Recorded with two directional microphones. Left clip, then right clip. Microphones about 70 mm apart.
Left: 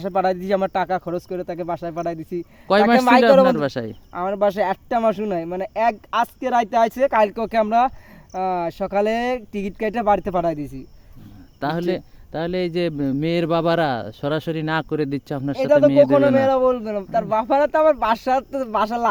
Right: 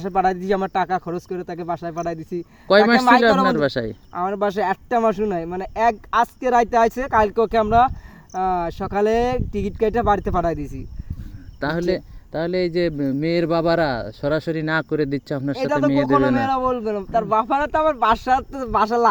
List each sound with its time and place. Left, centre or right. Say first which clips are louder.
0.0 s speech: right 1 dB; left
3.4 s speech: left 1 dB; centre
4.1 s speech: left 2 dB; left
11.9 s speech: right 2 dB; centre
14.6 s speech: right 1 dB; centre
16.0 s speech: left 2 dB; centre
16.3 s speech: left 3 dB; left